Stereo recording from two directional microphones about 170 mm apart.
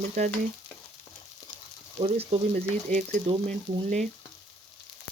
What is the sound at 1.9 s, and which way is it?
Speech, 35° right (ahead or behind).